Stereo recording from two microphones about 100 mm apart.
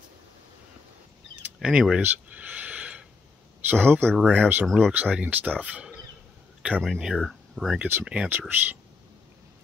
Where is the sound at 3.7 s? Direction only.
20° right (ahead or behind).